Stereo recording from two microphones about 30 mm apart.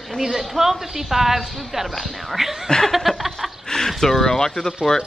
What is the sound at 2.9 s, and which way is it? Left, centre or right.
Speech, centre.